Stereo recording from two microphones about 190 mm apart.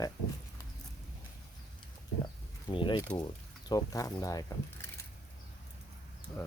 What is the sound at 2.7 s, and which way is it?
Speech, 25° left (ahead or behind).